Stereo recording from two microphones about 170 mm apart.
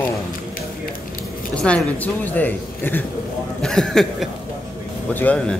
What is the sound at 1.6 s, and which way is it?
Speech, 5° left (ahead or behind).